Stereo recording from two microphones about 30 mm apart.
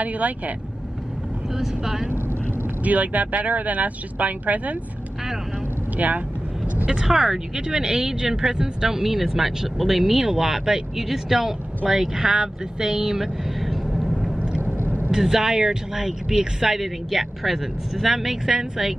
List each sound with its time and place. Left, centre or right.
0.0 s speech: right
1.6 s speech: centre
2.8 s speech: right
5.9 s speech: right
6.9 s speech: centre
13.2 s vehicle: centre
14.7 s vehicle: right
15.1 s speech: centre